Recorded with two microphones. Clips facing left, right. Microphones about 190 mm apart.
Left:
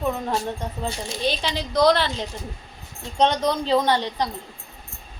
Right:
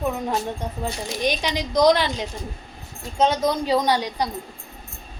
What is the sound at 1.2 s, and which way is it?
A woman's voice, 15° right (ahead or behind).